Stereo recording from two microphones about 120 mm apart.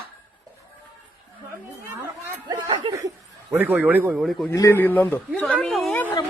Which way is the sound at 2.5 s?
40° right (ahead or behind).